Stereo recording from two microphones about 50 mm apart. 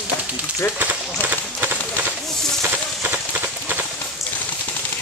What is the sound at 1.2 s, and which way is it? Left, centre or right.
Run, right.